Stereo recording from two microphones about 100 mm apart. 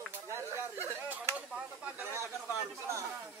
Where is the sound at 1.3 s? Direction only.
15° right (ahead or behind).